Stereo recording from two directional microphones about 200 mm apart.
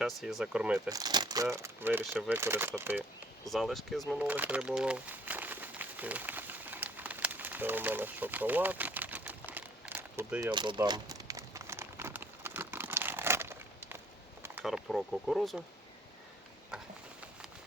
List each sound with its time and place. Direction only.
0.0 s speech: centre (ahead or behind)
0.9 s speech: 20° right (ahead or behind)
3.5 s speech: centre (ahead or behind)
4.1 s crumpling: 5° right (ahead or behind)
14.6 s speech: centre (ahead or behind)
16.7 s a sound: 5° right (ahead or behind)